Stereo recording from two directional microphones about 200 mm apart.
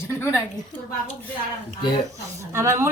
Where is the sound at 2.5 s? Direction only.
15° right (ahead or behind).